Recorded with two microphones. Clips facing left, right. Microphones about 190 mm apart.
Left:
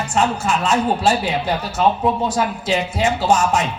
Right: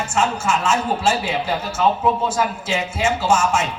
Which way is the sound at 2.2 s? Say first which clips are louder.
Left 2 dB; 35° left (ahead or behind).